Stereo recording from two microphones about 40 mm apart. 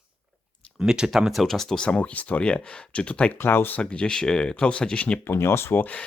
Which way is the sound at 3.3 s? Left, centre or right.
Left.